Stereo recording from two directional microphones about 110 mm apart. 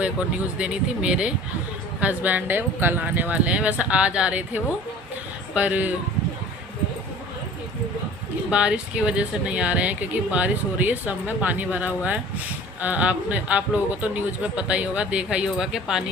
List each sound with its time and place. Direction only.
0.0 s speech: 10° right (ahead or behind)
8.4 s speech: 10° right (ahead or behind)